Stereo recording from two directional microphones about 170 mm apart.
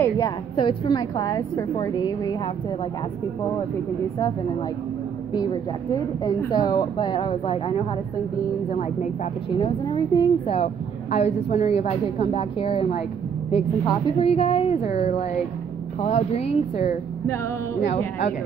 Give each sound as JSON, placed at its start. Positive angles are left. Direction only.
{"t": 0.0, "sound": "a woman's voice", "side_deg": 25}
{"t": 5.3, "sound": "a woman's voice", "side_deg": 25}
{"t": 9.6, "sound": "a woman's voice", "side_deg": 25}